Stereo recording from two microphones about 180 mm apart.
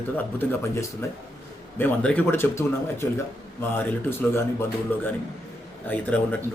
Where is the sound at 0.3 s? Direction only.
15° left (ahead or behind).